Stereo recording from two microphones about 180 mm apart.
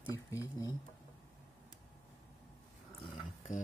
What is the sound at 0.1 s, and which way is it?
Speech, 15° left (ahead or behind).